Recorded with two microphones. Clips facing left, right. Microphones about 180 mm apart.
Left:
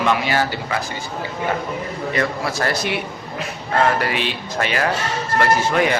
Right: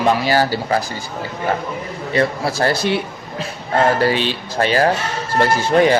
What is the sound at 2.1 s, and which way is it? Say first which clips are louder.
A man's voice: right 5 dB; 30° right (ahead or behind).